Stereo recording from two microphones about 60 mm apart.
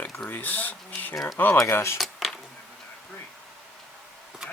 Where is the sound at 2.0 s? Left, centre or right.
Centre.